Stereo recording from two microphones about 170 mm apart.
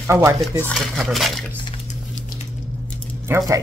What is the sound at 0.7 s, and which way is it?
Speech, centre (ahead or behind).